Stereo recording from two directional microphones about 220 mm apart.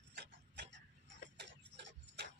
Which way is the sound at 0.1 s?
50° right (ahead or behind).